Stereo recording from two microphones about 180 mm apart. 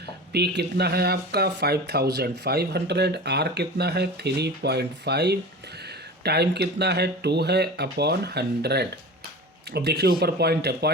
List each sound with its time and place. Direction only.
0.3 s speech: 65° right (ahead or behind)